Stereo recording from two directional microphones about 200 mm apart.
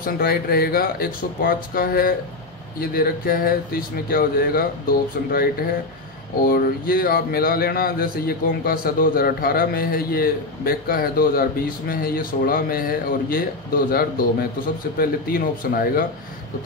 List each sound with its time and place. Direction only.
0.0 s speech: 50° left (ahead or behind)